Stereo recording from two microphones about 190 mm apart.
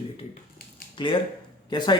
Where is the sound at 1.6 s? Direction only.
25° left (ahead or behind).